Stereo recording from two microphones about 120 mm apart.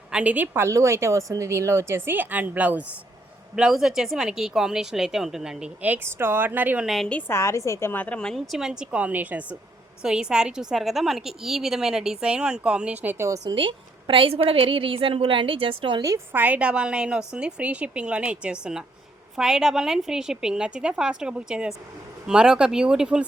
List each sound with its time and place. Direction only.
0.1 s a woman's voice: 10° right (ahead or behind)
6.8 s speech: centre (ahead or behind)
7.1 s a woman's voice: 15° left (ahead or behind); by 13.4 s 25° right (ahead or behind)
13.5 s a woman's voice: 45° right (ahead or behind)
16.0 s a woman's voice: 20° right (ahead or behind)